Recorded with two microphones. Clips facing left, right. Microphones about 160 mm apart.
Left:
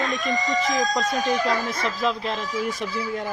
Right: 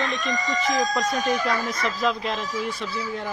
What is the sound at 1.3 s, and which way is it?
Speech, 30° left (ahead or behind).